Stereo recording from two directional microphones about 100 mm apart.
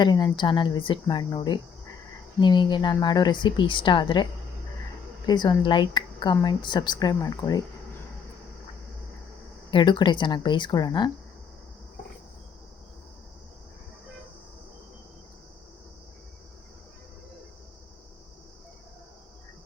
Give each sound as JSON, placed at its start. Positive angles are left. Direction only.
{"t": 0.0, "sound": "speech", "side_deg": 45}
{"t": 9.6, "sound": "speech", "side_deg": 55}